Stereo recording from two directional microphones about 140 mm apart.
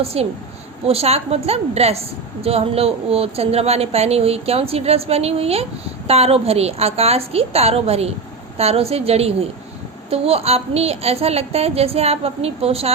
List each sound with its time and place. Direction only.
0.0 s a woman's voice: 45° right (ahead or behind)